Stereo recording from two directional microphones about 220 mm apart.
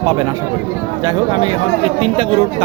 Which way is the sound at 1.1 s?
25° right (ahead or behind).